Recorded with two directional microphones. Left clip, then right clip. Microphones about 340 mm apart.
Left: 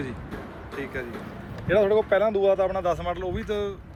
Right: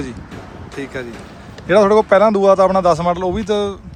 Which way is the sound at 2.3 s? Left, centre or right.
Right.